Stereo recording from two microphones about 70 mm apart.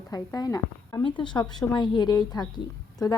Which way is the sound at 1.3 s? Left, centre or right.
Left.